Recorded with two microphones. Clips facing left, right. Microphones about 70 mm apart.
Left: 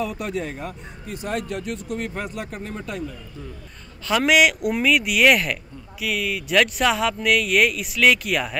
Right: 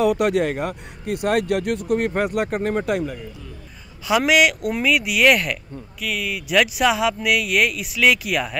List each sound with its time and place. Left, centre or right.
0.0 s speech: right
4.1 s speech: centre